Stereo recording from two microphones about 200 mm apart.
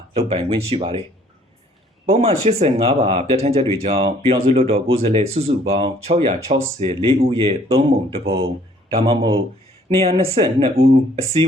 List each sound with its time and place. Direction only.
0.1 s speech: 30° right (ahead or behind)
2.1 s speech: 30° right (ahead or behind)
9.9 s speech: 30° right (ahead or behind)